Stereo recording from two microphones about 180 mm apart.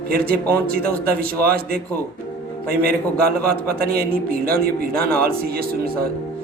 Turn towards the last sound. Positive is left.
turn(degrees=-55)  # may be behind; listen again after turning